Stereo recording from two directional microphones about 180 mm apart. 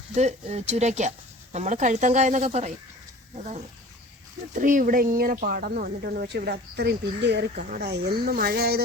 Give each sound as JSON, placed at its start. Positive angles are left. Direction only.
{"t": 0.2, "sound": "speech", "side_deg": -40}